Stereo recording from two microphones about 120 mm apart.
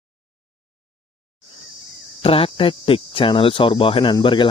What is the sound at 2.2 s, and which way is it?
Speech, 50° left (ahead or behind).